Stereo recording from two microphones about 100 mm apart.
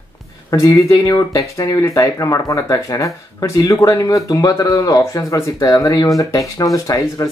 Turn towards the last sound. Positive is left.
turn(degrees=35)  # may be behind; listen again after turning